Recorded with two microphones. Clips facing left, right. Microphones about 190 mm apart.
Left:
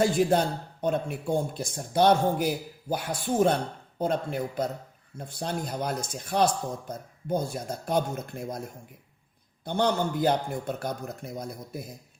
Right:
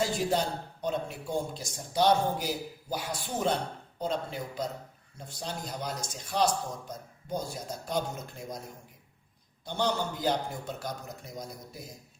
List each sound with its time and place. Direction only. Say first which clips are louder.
0.0 s speech: left 6 dB; 55° left (ahead or behind)
9.6 s speech: left 5 dB; 55° left (ahead or behind)